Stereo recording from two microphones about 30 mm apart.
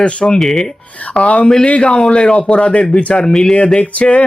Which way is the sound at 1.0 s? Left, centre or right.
Left.